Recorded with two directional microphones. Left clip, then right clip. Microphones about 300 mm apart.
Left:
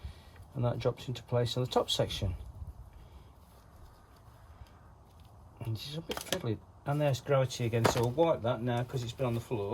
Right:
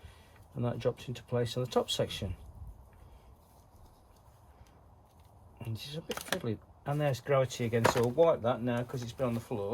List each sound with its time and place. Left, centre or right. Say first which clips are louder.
0.5 s speech: left 1 dB; centre
5.5 s speech: left 1 dB; centre